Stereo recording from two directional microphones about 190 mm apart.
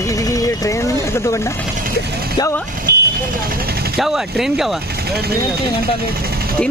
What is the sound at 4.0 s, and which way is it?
Speech, centre (ahead or behind).